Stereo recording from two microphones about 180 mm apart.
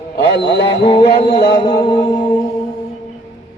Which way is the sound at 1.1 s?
35° left (ahead or behind).